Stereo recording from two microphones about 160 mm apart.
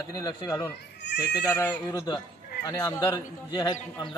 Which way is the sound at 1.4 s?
10° left (ahead or behind).